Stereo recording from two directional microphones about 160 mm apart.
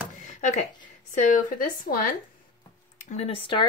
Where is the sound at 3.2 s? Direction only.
35° left (ahead or behind).